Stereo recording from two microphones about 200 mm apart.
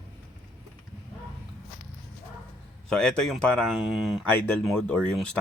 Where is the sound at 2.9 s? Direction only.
5° left (ahead or behind).